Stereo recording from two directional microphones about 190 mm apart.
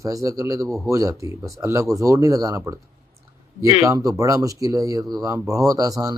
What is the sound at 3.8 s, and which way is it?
Speech, 15° right (ahead or behind).